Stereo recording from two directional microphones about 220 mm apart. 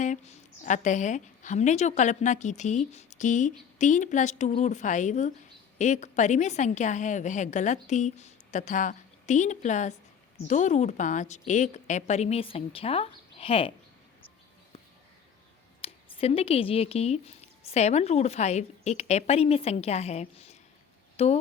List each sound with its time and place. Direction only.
0.0 s a woman's voice: 30° left (ahead or behind)
15.8 s speech: 25° left (ahead or behind)